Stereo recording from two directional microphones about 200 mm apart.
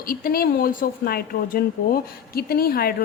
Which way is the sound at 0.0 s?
45° left (ahead or behind).